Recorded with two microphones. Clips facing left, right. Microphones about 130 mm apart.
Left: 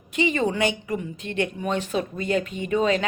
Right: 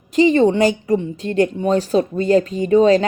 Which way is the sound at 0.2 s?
35° right (ahead or behind).